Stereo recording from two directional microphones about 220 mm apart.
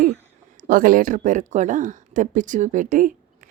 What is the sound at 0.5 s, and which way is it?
A woman's voice, 40° right (ahead or behind).